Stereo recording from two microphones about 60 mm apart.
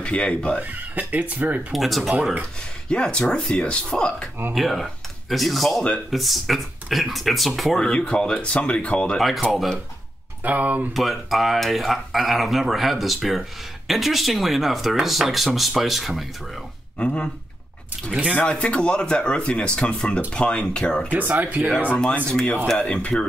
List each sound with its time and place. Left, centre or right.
0.0 s speech: centre
0.6 s speech: right
1.7 s speech: centre
2.9 s speech: centre
4.6 s speech: centre
7.8 s speech: centre
10.4 s speech: right
10.9 s speech: centre
17.0 s speech: centre
18.3 s speech: centre
21.1 s speech: right
21.8 s speech: left